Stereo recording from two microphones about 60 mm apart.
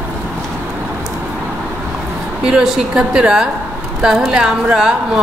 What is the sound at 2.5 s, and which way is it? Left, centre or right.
A woman's voice, centre.